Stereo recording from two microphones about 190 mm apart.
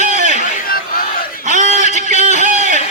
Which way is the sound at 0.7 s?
50° left (ahead or behind).